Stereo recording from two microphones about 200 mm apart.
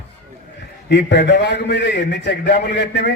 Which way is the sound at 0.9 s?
60° left (ahead or behind).